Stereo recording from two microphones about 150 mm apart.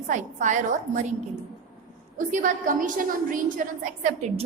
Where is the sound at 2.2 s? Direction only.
60° right (ahead or behind).